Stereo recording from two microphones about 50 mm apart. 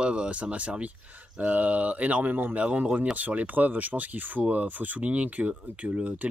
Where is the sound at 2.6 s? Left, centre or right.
Right.